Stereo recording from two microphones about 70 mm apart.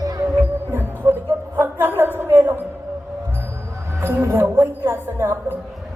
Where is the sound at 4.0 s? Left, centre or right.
Right.